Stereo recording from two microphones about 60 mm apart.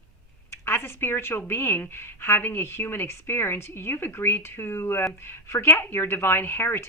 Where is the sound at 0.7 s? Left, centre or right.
Left.